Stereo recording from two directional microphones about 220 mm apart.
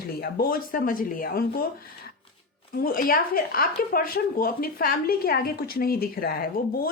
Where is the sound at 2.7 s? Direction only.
40° left (ahead or behind).